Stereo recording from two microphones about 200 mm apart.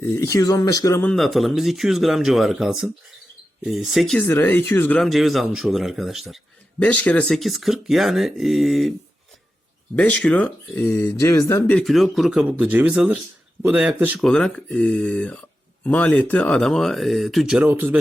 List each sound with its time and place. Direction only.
0.0 s speech: 15° left (ahead or behind)
1.1 s speech: centre (ahead or behind)
9.9 s speech: 5° left (ahead or behind)
11.8 s speech: centre (ahead or behind)